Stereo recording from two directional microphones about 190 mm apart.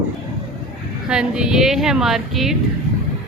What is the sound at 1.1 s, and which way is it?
A woman's voice, 5° right (ahead or behind).